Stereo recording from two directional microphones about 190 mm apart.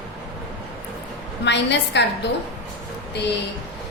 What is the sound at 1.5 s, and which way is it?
Speech, 65° left (ahead or behind).